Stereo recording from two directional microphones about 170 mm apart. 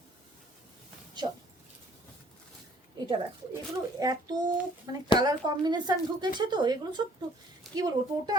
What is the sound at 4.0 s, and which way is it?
Speech, 25° right (ahead or behind).